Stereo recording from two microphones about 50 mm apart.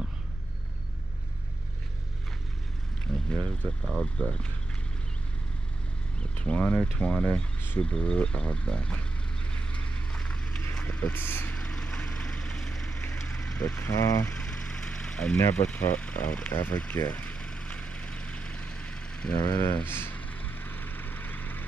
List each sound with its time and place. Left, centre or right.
3.1 s a sound: centre
3.4 s speech: centre
4.0 s speech: centre
6.4 s speech: left
9.7 s vehicle: left
10.8 s speech: left
11.5 s vehicle: centre
13.7 s speech: left
14.4 s vehicle: centre
15.5 s speech: left
17.0 s vehicle: left
19.5 s speech: left
19.9 s speech: left
20.2 s vehicle: left